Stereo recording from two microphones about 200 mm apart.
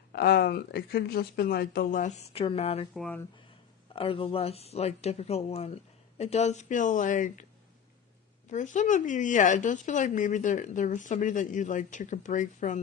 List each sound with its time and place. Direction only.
0.1 s speech: 55° left (ahead or behind); by 2.8 s 30° left (ahead or behind)
2.9 s speech: 5° left (ahead or behind)
3.9 s speech: 25° left (ahead or behind)
8.4 s speech: 40° left (ahead or behind)